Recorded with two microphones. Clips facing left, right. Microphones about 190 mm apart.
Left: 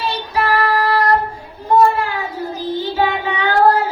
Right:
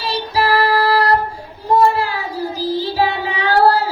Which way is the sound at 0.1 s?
35° right (ahead or behind).